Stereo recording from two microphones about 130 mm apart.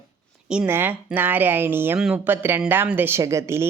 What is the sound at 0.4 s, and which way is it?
A woman's voice, 5° right (ahead or behind).